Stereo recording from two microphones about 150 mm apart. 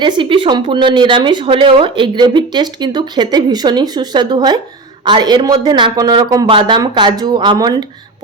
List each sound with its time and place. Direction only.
0.0 s a woman's voice: 35° right (ahead or behind)